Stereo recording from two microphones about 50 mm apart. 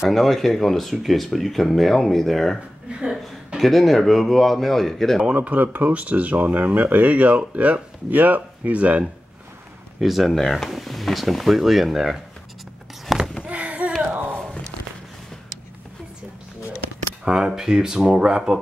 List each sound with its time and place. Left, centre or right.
0.1 s speech: centre
3.0 s speech: centre
3.5 s speech: centre
5.3 s speech: right
9.9 s speech: centre
13.4 s a sound: right
17.2 s speech: centre